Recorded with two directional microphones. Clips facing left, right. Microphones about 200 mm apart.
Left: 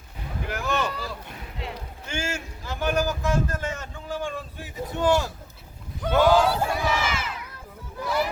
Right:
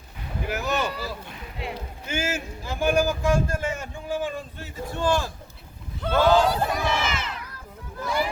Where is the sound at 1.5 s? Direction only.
10° right (ahead or behind).